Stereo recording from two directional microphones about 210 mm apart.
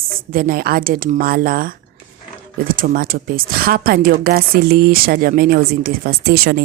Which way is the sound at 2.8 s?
40° right (ahead or behind).